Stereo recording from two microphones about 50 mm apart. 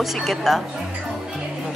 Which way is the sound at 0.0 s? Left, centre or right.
Centre.